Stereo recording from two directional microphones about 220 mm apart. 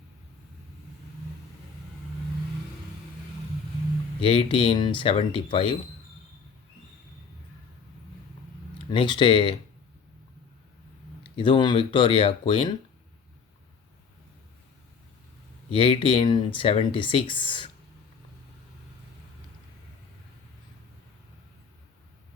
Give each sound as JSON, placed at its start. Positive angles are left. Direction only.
{"t": 4.2, "sound": "speech", "side_deg": 25}
{"t": 8.9, "sound": "speech", "side_deg": 20}
{"t": 11.2, "sound": "speech", "side_deg": 20}
{"t": 15.7, "sound": "speech", "side_deg": 25}